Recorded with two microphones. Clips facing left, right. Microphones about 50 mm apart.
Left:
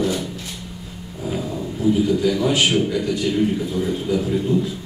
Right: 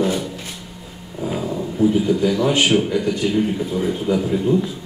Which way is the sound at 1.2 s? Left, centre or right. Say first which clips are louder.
Right 2 dB; centre.